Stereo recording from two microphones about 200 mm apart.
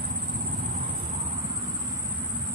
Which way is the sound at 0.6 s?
30° right (ahead or behind).